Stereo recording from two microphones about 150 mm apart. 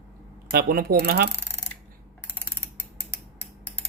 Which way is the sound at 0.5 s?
85° right.